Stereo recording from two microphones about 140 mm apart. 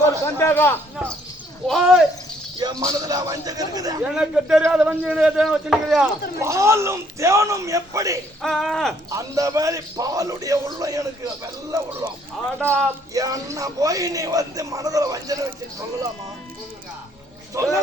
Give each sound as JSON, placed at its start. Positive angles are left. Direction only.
{"t": 0.0, "sound": "a man's voice", "side_deg": 20}
{"t": 1.6, "sound": "speech", "side_deg": 0}
{"t": 2.6, "sound": "a man's voice", "side_deg": -30}
{"t": 4.0, "sound": "speech", "side_deg": -5}
{"t": 6.4, "sound": "a man's voice", "side_deg": -20}
{"t": 8.4, "sound": "speech", "side_deg": 0}
{"t": 9.0, "sound": "a man's voice", "side_deg": -25}
{"t": 12.5, "sound": "speech", "side_deg": 5}
{"t": 13.1, "sound": "a man's voice", "side_deg": -25}
{"t": 17.5, "sound": "a man's voice", "side_deg": -25}